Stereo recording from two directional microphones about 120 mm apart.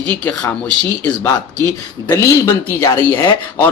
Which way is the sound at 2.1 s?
20° left (ahead or behind).